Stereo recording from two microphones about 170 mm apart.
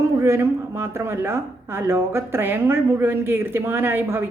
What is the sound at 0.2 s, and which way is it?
A woman's voice, 15° right (ahead or behind).